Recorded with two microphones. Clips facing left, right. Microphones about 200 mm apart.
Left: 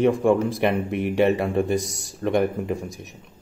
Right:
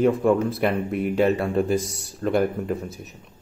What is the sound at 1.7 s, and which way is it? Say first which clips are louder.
Speech: even; 70° left (ahead or behind).